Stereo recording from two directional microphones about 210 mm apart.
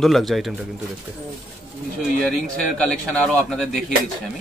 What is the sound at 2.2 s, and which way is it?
Speech, centre (ahead or behind).